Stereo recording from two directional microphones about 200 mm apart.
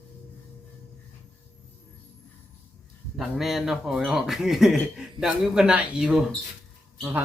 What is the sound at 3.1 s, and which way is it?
Speech, centre (ahead or behind).